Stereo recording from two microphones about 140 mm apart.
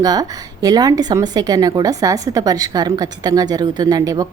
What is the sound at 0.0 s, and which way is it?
A woman's voice, 25° right (ahead or behind).